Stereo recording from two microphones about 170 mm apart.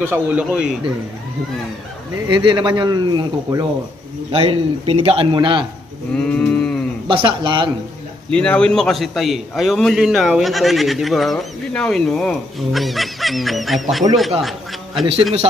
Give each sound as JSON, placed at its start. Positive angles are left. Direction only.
{"t": 0.0, "sound": "a man's voice", "side_deg": -10}
{"t": 2.2, "sound": "speech", "side_deg": -25}
{"t": 4.3, "sound": "a man's voice", "side_deg": -35}
{"t": 6.1, "sound": "a sound", "side_deg": 5}
{"t": 7.1, "sound": "speech", "side_deg": -30}
{"t": 8.3, "sound": "a man's voice", "side_deg": 5}